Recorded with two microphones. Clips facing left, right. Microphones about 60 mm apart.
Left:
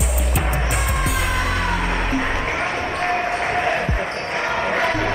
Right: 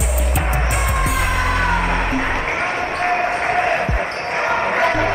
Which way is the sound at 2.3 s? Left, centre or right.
Right.